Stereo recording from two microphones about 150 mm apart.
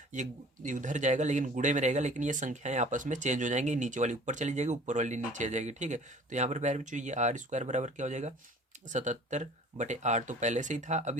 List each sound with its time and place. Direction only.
0.1 s speech: 55° right (ahead or behind)